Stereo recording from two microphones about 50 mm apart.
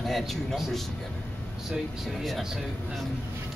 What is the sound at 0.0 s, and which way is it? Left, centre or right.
Speech, centre.